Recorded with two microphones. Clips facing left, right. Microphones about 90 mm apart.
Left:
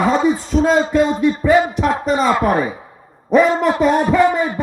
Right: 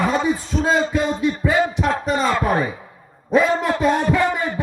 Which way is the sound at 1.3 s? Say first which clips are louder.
Left 5 dB; 15° left (ahead or behind).